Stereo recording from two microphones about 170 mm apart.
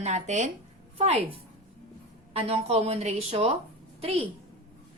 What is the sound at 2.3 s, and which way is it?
A woman's voice, 35° right (ahead or behind).